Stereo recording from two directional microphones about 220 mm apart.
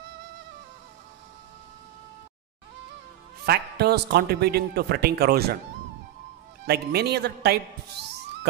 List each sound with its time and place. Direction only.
3.4 s speech: 45° right (ahead or behind)
6.6 s speech: 45° right (ahead or behind)